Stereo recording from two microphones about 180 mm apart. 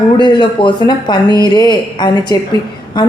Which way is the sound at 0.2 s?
25° left (ahead or behind).